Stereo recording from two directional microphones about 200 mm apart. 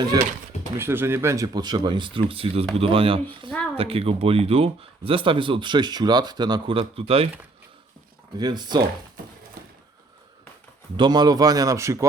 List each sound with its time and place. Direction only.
0.8 s speech: 10° right (ahead or behind); by 7.3 s 30° right (ahead or behind)
8.4 s speech: 20° right (ahead or behind)
9.6 s a sound: 50° right (ahead or behind)
10.9 s speech: 20° right (ahead or behind)